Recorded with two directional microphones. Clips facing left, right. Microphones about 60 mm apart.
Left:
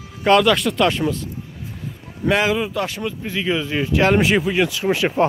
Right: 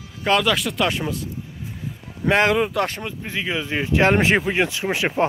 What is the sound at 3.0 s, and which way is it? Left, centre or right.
Speech, right.